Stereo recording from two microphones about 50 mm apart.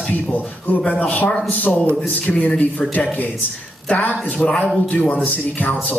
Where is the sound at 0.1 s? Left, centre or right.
Left.